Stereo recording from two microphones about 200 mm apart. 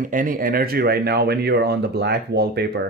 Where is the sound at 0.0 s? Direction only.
45° right (ahead or behind).